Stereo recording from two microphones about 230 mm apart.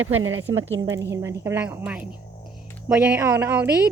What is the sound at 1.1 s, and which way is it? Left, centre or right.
Speech, centre.